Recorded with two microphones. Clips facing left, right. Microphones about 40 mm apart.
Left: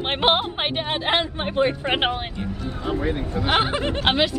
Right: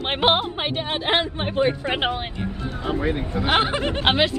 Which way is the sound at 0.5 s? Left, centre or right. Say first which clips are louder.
Left 1 dB; left.